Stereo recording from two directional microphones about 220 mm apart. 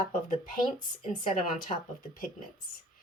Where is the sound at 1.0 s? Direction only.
35° left (ahead or behind).